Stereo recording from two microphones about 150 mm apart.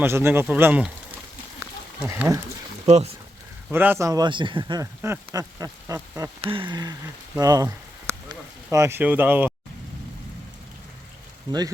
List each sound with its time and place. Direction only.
0.0 s a sound: 15° right (ahead or behind)
2.0 s speech: 20° right (ahead or behind)
2.8 s speech: 45° right (ahead or behind)
3.7 s speech: 15° right (ahead or behind); by 4.8 s 35° right (ahead or behind)
4.8 s speech: 20° right (ahead or behind)
6.4 s speech: 35° right (ahead or behind); by 9.5 s 15° right (ahead or behind)